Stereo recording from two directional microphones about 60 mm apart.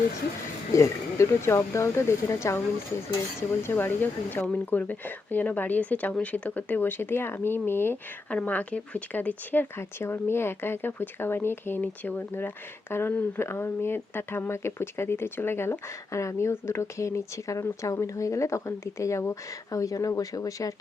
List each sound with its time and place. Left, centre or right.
0.7 s speech: left
3.6 s speech: left
8.3 s speech: left
9.7 s speech: left
16.1 s speech: left